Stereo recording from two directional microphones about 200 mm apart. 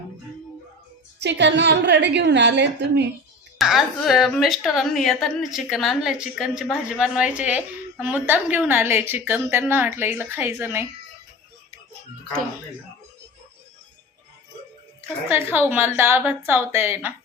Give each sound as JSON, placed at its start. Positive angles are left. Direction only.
{"t": 1.2, "sound": "a woman's voice", "side_deg": -60}
{"t": 3.6, "sound": "a woman's voice", "side_deg": 0}
{"t": 15.3, "sound": "a woman's voice", "side_deg": -10}